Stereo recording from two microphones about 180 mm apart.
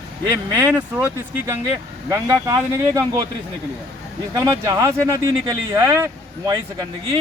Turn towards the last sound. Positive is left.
turn(degrees=-20)  # may be behind; listen again after turning